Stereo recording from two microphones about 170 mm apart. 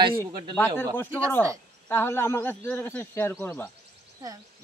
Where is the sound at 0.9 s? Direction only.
10° left (ahead or behind).